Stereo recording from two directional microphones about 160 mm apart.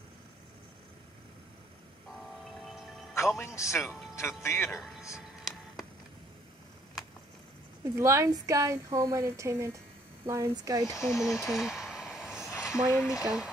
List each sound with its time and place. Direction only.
2.1 s music: centre (ahead or behind)
3.3 s a man's voice: 20° left (ahead or behind)
8.0 s speech: 20° right (ahead or behind)
10.9 s a man's voice: 20° left (ahead or behind)
11.1 s speech: centre (ahead or behind)
11.5 s a sound: 5° right (ahead or behind)
13.0 s speech: 5° right (ahead or behind)